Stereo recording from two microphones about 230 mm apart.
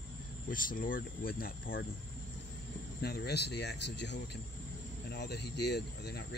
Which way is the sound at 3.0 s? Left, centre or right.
Left.